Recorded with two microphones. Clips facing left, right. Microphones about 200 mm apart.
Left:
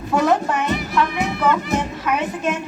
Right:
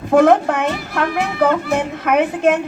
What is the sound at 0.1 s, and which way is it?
A woman's voice, 55° right (ahead or behind).